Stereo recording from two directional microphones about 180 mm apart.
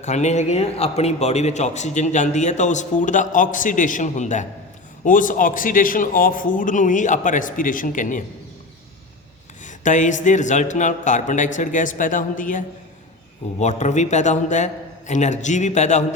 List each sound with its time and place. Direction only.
0.0 s a man's voice: 40° left (ahead or behind)
9.6 s a man's voice: 45° left (ahead or behind)